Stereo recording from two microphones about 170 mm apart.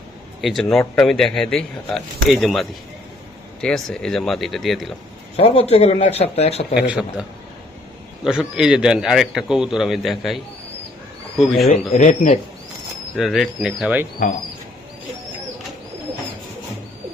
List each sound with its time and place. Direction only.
0.4 s speech: centre (ahead or behind)
5.4 s a man's voice: 35° left (ahead or behind)
6.7 s a man's voice: 5° right (ahead or behind)
11.7 s speech: 45° left (ahead or behind)
13.1 s speech: centre (ahead or behind)